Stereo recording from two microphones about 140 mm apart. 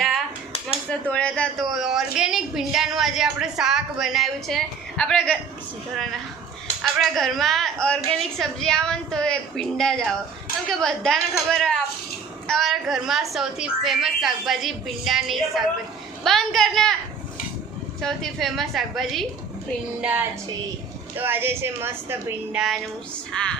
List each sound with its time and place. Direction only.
0.9 s a woman's voice: 10° left (ahead or behind)
7.0 s a woman's voice: centre (ahead or behind)
18.0 s a woman's voice: centre (ahead or behind)
20.0 s speech: 10° right (ahead or behind)
23.3 s a woman's voice: 5° left (ahead or behind)